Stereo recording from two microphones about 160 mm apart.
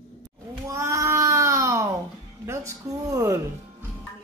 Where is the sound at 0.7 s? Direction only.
20° right (ahead or behind).